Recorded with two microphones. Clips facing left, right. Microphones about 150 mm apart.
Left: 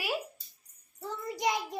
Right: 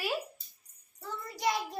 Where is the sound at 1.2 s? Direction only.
20° left (ahead or behind).